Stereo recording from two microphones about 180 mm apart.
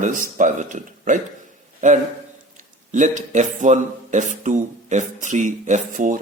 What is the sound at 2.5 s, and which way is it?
Speech, 45° right (ahead or behind).